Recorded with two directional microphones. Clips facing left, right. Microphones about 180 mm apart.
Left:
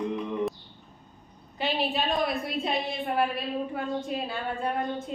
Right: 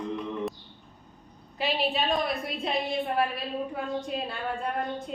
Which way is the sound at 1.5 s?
Centre (ahead or behind).